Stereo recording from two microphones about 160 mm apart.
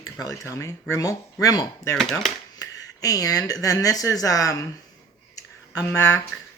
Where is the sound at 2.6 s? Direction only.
20° left (ahead or behind).